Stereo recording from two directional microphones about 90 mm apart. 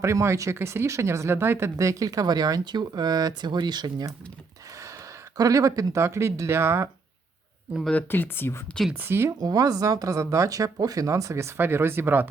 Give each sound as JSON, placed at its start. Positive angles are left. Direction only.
{"t": 0.0, "sound": "speech", "side_deg": -35}
{"t": 1.7, "sound": "speech", "side_deg": -35}
{"t": 5.4, "sound": "speech", "side_deg": -40}
{"t": 8.1, "sound": "speech", "side_deg": 25}
{"t": 8.9, "sound": "speech", "side_deg": -25}
{"t": 9.4, "sound": "speech", "side_deg": -45}